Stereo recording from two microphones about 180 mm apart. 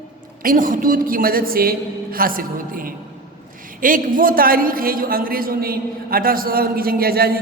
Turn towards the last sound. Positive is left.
turn(degrees=-55)  # may be behind; listen again after turning